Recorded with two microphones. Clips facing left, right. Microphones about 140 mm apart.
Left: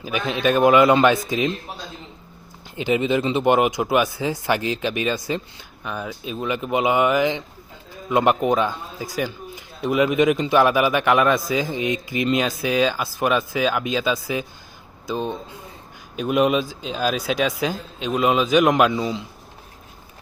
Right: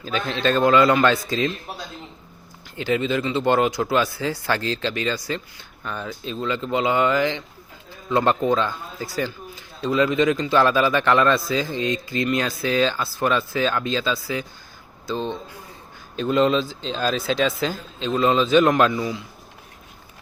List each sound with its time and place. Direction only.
0.0 s a man's voice: 15° left (ahead or behind)
2.7 s a man's voice: 20° left (ahead or behind)